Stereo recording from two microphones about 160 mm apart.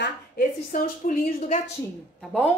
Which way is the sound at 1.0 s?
55° left (ahead or behind).